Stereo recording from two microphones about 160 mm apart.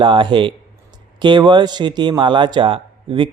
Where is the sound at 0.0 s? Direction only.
30° right (ahead or behind).